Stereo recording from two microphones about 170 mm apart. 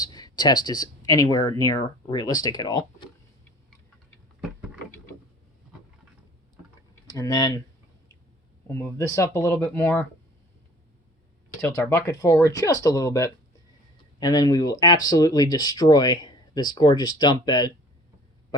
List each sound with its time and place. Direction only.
0.0 s speech: 25° left (ahead or behind)
4.4 s a sound: 5° right (ahead or behind)
7.1 s speech: 25° left (ahead or behind)
8.6 s speech: 15° left (ahead or behind)
11.6 s speech: 15° left (ahead or behind)